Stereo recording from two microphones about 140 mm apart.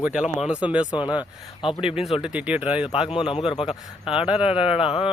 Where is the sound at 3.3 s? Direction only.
40° left (ahead or behind).